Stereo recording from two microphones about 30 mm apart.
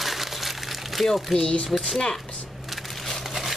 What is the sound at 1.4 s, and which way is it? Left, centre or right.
Speech, left.